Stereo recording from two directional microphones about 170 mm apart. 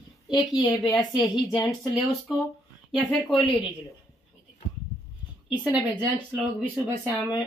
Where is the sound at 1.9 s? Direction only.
Centre (ahead or behind).